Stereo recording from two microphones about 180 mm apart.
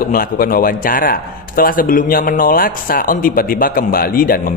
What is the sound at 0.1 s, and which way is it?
A man's voice, 55° left (ahead or behind).